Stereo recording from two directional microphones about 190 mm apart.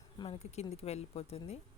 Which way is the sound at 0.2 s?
35° left (ahead or behind).